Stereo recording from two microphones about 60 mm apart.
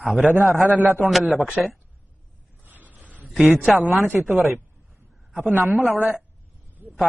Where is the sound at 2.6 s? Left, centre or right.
Right.